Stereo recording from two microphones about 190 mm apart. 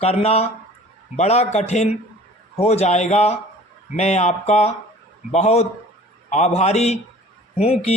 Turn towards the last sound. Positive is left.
turn(degrees=35)  # may be behind; listen again after turning